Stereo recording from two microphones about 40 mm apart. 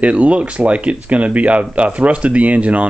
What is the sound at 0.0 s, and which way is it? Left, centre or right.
Speech, right.